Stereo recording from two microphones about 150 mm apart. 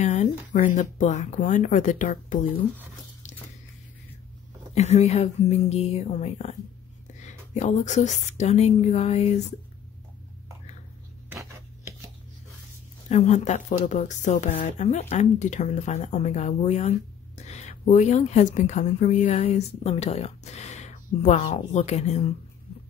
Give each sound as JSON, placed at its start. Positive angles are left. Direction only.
{"t": 0.0, "sound": "speech", "side_deg": 50}
{"t": 4.7, "sound": "speech", "side_deg": 45}
{"t": 13.1, "sound": "a woman's voice", "side_deg": 50}